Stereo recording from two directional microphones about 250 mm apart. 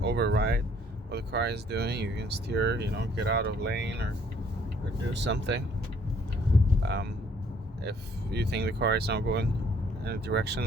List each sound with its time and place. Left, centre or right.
0.0 s speech: right
5.2 s speech: right
6.8 s speech: right